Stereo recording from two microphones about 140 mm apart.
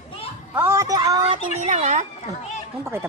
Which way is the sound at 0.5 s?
15° right (ahead or behind).